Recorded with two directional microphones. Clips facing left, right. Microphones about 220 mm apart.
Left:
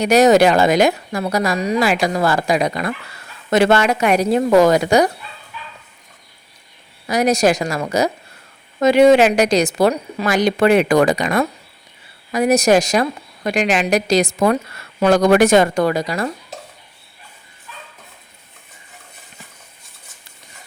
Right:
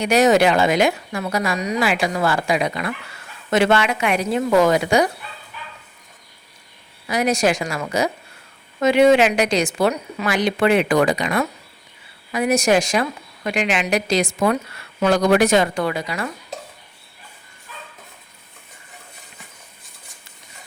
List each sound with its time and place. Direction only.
0.0 s a woman's voice: 40° left (ahead or behind)
7.1 s a woman's voice: 40° left (ahead or behind)